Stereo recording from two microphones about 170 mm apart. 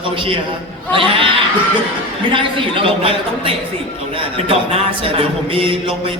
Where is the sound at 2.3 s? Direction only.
30° right (ahead or behind).